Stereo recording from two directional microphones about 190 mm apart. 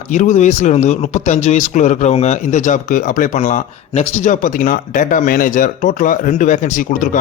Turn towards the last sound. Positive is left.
turn(degrees=45)  # may be behind; listen again after turning